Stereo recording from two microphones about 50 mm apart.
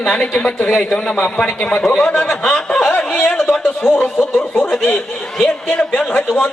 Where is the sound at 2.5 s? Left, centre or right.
Centre.